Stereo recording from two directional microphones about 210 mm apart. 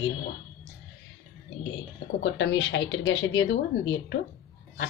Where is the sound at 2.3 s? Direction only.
60° left (ahead or behind).